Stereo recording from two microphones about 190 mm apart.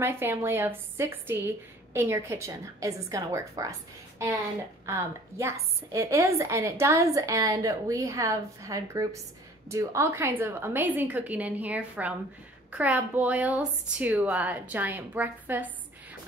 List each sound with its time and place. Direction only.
0.0 s a woman's voice: 10° right (ahead or behind)
4.8 s a woman's voice: 15° right (ahead or behind)